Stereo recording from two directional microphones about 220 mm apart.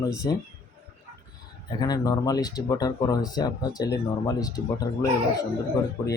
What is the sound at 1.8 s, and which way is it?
Speech, 15° left (ahead or behind).